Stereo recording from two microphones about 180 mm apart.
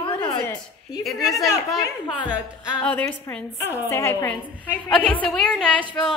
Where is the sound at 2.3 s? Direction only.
5° right (ahead or behind).